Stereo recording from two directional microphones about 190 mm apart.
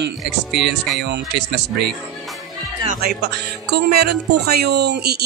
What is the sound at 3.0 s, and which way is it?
Speech, 60° right (ahead or behind).